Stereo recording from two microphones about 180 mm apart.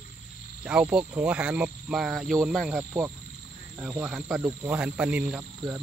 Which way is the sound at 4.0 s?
5° right (ahead or behind).